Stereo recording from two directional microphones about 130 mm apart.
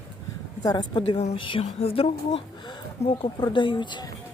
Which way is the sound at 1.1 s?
55° left (ahead or behind).